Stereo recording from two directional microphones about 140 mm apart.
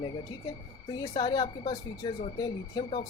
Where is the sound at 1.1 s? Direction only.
30° left (ahead or behind).